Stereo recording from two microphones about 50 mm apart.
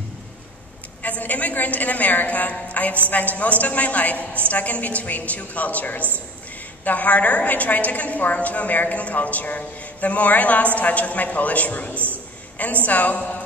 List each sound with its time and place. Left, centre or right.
1.0 s a woman's voice: left